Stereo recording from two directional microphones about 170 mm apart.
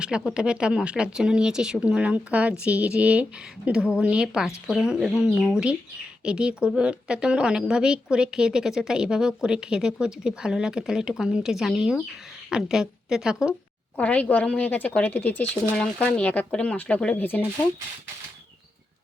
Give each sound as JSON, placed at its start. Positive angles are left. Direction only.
{"t": 0.0, "sound": "a woman's voice", "side_deg": -5}
{"t": 13.9, "sound": "speech", "side_deg": 10}